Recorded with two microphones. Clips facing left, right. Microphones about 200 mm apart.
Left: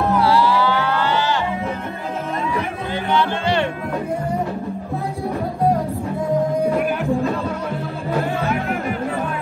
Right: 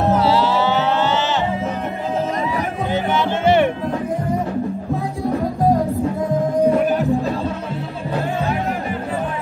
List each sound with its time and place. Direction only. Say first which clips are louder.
0.0 s music: even; 20° right (ahead or behind)
2.9 s music: even; 20° right (ahead or behind)